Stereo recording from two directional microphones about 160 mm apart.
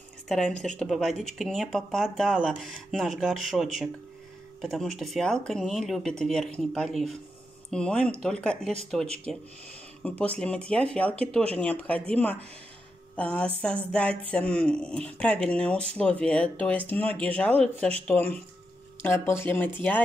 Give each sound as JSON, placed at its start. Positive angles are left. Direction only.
{"t": 0.3, "sound": "speech", "side_deg": 5}